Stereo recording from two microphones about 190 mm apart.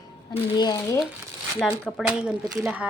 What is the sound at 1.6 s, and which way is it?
Speech, 5° left (ahead or behind).